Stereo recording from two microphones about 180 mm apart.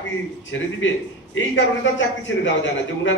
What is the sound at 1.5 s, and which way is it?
Speech, 90° left.